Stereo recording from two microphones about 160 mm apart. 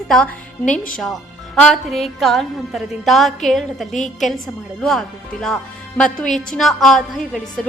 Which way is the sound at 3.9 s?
50° left (ahead or behind).